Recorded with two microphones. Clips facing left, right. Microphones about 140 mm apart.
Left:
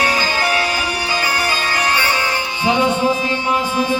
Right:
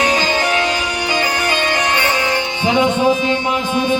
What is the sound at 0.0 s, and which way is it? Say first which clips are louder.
Music: right 2 dB; 20° right (ahead or behind).